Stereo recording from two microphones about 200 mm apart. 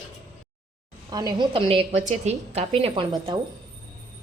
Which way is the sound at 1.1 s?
20° right (ahead or behind).